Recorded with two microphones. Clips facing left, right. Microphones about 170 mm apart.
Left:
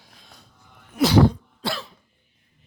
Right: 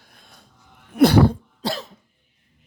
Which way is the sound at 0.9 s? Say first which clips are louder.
Right 3 dB; 55° right (ahead or behind).